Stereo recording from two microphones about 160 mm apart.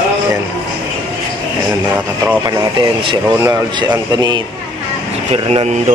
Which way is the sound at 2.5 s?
30° right (ahead or behind).